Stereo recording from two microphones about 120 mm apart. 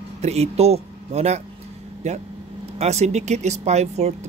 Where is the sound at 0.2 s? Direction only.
60° right (ahead or behind).